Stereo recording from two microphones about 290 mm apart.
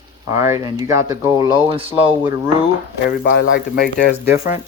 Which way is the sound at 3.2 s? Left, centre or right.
Left.